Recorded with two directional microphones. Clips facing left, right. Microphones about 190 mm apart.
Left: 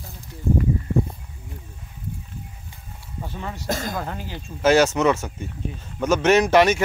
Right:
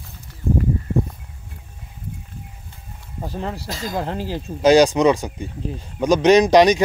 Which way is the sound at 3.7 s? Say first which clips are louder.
Left 2 dB; 50° left (ahead or behind).